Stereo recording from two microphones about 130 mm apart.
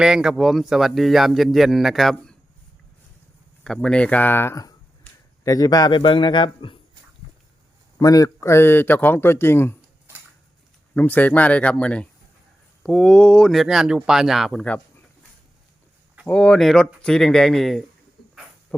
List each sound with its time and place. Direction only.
0.0 s a man's voice: 5° right (ahead or behind)
3.6 s a man's voice: 5° left (ahead or behind); by 6.7 s 40° left (ahead or behind)
7.9 s a man's voice: 30° left (ahead or behind)
10.9 s a man's voice: 15° left (ahead or behind)
16.2 s a man's voice: 5° left (ahead or behind)